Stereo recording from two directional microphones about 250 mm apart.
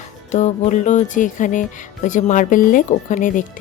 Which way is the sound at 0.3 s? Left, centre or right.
Left.